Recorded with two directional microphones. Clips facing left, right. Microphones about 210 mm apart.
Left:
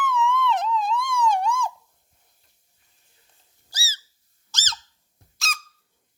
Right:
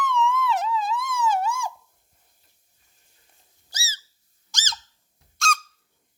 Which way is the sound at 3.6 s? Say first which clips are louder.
Even; 20° right (ahead or behind).